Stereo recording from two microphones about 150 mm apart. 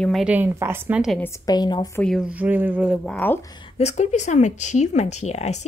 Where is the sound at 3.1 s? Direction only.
10° left (ahead or behind).